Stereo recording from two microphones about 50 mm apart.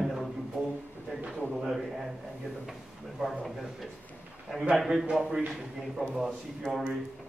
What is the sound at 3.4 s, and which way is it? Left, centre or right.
A man's voice, centre.